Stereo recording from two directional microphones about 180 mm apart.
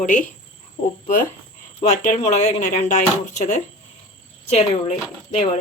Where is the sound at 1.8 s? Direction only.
45° left (ahead or behind).